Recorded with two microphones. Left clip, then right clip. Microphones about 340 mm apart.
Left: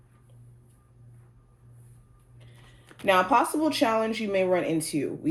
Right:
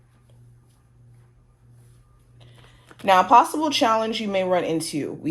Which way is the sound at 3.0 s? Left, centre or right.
Right.